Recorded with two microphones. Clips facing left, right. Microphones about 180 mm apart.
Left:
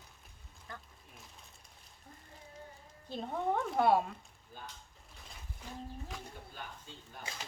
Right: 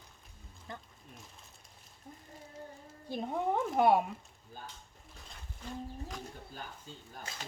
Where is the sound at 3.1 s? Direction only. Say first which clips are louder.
Right 2 dB; 15° right (ahead or behind).